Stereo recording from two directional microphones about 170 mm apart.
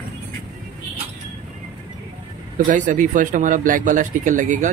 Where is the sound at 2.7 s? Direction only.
50° right (ahead or behind).